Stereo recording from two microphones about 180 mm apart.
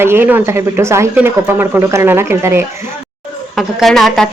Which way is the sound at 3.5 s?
Centre (ahead or behind).